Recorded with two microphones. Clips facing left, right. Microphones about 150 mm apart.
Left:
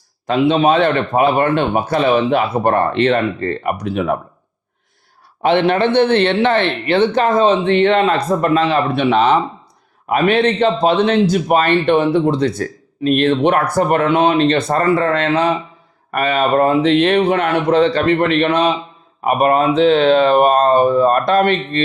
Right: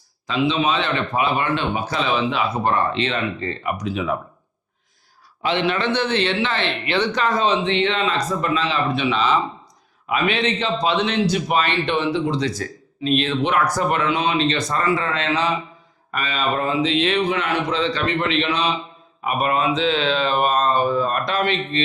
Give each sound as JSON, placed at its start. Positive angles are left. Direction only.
{"t": 0.3, "sound": "a man's voice", "side_deg": 55}
{"t": 5.4, "sound": "a man's voice", "side_deg": 55}